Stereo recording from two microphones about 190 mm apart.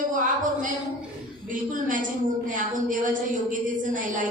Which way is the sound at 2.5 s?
45° right (ahead or behind).